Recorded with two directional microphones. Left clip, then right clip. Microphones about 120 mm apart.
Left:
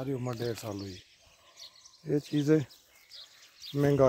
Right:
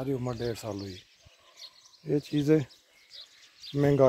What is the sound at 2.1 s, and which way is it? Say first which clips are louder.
Speech: right 2 dB; centre (ahead or behind).